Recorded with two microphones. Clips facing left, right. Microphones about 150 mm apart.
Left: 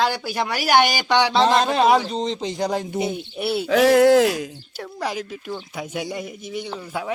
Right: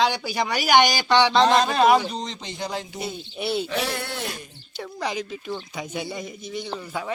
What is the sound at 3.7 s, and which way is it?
Speech, 90° left.